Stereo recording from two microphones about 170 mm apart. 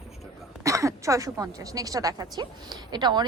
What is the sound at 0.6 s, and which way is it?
A woman's voice, 20° right (ahead or behind).